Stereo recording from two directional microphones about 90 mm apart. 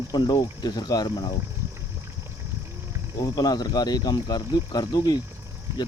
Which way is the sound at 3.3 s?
50° left (ahead or behind).